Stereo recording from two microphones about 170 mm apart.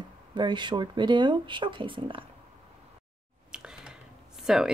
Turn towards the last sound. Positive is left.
turn(degrees=0)  # may be behind; listen again after turning